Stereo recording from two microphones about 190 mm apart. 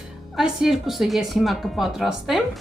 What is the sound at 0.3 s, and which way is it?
Speech, centre (ahead or behind).